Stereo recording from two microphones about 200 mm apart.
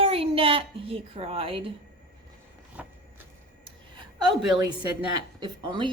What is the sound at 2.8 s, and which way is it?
Vehicle, 5° right (ahead or behind).